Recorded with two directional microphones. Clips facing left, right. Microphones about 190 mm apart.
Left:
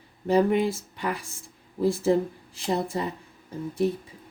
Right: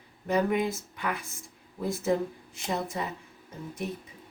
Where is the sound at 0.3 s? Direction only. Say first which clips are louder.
Left 5 dB; 30° left (ahead or behind).